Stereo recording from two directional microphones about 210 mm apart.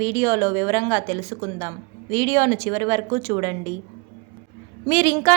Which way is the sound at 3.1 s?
35° right (ahead or behind).